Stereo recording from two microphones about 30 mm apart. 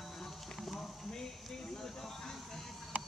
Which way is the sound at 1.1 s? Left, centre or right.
Centre.